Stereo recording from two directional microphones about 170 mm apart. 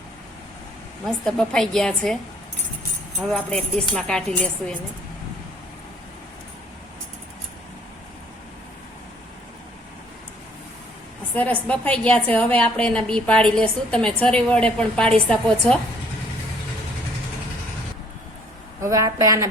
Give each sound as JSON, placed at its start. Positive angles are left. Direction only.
{"t": 1.0, "sound": "a woman's voice", "side_deg": 5}
{"t": 3.2, "sound": "a woman's voice", "side_deg": 5}
{"t": 11.3, "sound": "a woman's voice", "side_deg": 10}
{"t": 18.8, "sound": "a woman's voice", "side_deg": -20}